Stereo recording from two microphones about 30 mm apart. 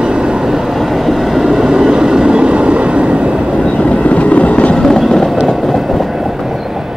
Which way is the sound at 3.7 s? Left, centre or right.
Left.